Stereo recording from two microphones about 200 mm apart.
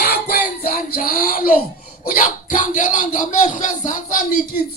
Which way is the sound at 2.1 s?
40° left (ahead or behind).